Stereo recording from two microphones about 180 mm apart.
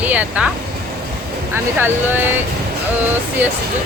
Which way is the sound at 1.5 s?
10° right (ahead or behind).